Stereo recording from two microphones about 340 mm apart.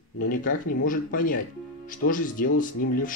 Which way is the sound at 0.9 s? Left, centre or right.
Left.